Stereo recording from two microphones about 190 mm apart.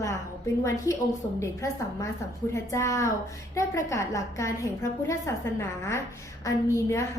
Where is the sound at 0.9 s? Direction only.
15° left (ahead or behind).